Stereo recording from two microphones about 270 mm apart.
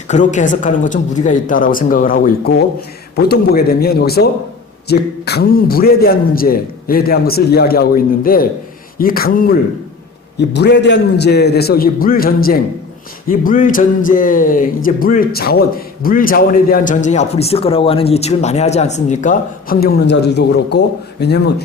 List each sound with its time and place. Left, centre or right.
0.1 s a man's voice: left